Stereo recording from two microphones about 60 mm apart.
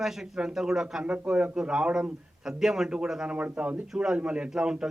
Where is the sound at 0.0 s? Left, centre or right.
Centre.